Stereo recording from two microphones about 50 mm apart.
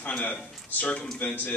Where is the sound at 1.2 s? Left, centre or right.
Left.